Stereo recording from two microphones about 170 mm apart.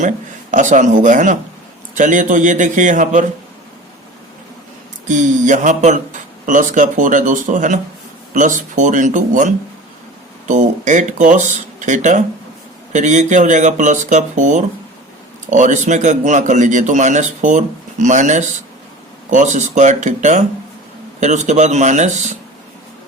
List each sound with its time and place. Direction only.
0.5 s a man's voice: 45° right (ahead or behind)
5.0 s a man's voice: 45° right (ahead or behind)